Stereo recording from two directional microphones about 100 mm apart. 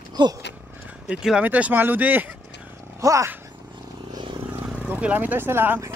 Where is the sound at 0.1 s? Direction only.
45° right (ahead or behind).